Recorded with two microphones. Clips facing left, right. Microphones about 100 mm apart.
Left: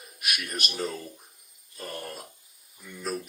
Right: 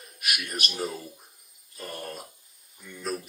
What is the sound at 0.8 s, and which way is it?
Speech, 15° right (ahead or behind).